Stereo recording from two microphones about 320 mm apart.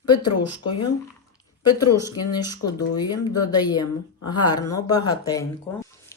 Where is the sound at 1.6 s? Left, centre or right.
Centre.